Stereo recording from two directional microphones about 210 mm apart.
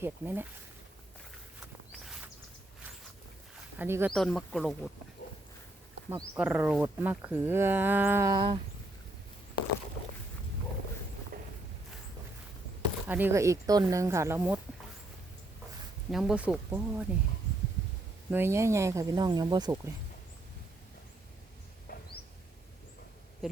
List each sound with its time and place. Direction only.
0.0 s speech: 10° right (ahead or behind)
3.8 s speech: 10° right (ahead or behind)
4.1 s speech: centre (ahead or behind)
6.1 s speech: 10° right (ahead or behind)
11.3 s walk: 45° right (ahead or behind)
13.1 s speech: 10° right (ahead or behind)
16.1 s speech: 5° right (ahead or behind)
18.3 s speech: 10° right (ahead or behind)
21.9 s a sound: 45° left (ahead or behind)
23.4 s a sound: centre (ahead or behind)